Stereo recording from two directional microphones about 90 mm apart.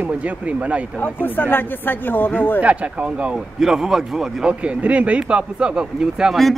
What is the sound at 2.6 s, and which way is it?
Speech, 15° right (ahead or behind).